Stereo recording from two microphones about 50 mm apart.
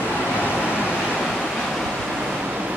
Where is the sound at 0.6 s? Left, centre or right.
Right.